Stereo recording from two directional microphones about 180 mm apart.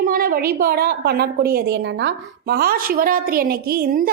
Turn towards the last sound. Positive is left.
turn(degrees=-55)  # may be behind; listen again after turning